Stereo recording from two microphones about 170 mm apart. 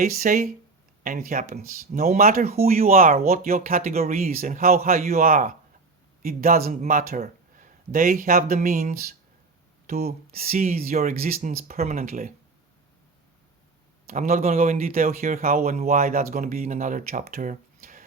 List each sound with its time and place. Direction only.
0.0 s speech: 55° right (ahead or behind)
14.1 s speech: 55° right (ahead or behind)